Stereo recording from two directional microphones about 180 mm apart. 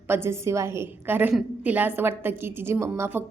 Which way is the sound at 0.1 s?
15° right (ahead or behind).